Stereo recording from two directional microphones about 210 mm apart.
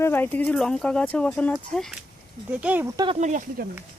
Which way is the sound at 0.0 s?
10° left (ahead or behind).